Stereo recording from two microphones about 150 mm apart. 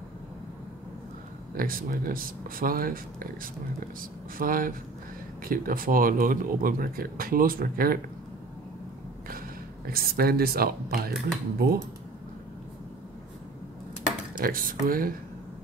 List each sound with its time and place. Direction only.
1.6 s speech: 70° right (ahead or behind)
9.8 s speech: 85° right
14.3 s speech: 70° right (ahead or behind)